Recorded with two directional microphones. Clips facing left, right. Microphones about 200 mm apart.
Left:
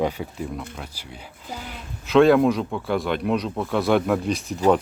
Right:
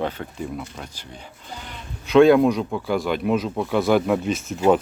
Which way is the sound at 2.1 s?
Centre (ahead or behind).